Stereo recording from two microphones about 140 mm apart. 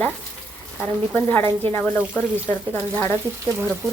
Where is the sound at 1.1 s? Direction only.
15° left (ahead or behind).